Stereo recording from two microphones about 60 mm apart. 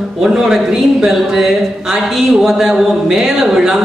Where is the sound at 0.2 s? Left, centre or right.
Centre.